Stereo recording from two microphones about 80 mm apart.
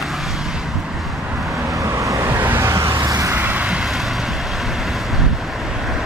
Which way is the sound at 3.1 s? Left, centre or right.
Right.